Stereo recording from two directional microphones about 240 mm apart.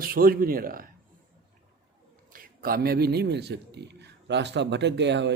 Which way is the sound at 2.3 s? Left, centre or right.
Right.